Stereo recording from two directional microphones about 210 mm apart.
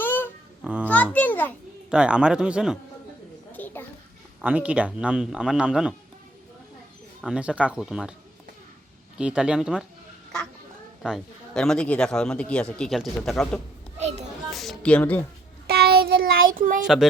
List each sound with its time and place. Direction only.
0.0 s babbling: 10° left (ahead or behind)
0.6 s a child's voice: 5° right (ahead or behind)
1.1 s a child's voice: 10° left (ahead or behind)
1.9 s a man's voice: 5° right (ahead or behind)
3.5 s a sound: 10° left (ahead or behind)
4.4 s a man's voice: 5° right (ahead or behind)
7.2 s a man's voice: 5° right (ahead or behind)
9.1 s a man's voice: 5° right (ahead or behind)
11.0 s a man's voice: centre (ahead or behind)
14.5 s a sound: centre (ahead or behind)
15.6 s child singing: 50° right (ahead or behind)
16.8 s a man's voice: centre (ahead or behind)